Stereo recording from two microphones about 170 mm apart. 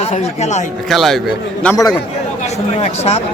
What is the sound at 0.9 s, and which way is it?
Speech, centre (ahead or behind).